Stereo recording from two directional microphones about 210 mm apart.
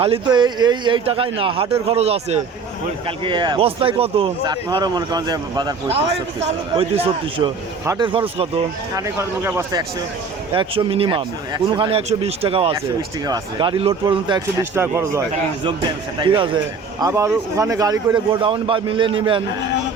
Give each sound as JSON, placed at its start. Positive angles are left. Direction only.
{"t": 0.0, "sound": "speech", "side_deg": -25}
{"t": 9.0, "sound": "speech", "side_deg": -10}
{"t": 10.5, "sound": "speech", "side_deg": -25}
{"t": 14.6, "sound": "speech", "side_deg": -10}
{"t": 16.2, "sound": "speech", "side_deg": -25}